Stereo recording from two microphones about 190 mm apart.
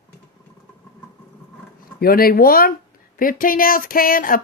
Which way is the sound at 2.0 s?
50° left (ahead or behind).